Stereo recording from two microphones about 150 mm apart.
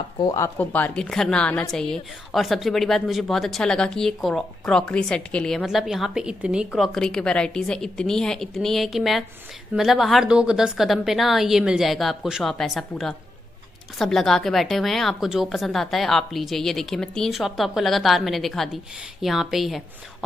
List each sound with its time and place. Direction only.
0.2 s speech: 25° left (ahead or behind)
0.6 s a woman's voice: 10° left (ahead or behind)